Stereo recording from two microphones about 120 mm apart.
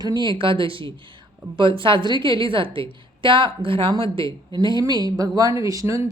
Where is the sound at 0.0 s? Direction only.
35° right (ahead or behind).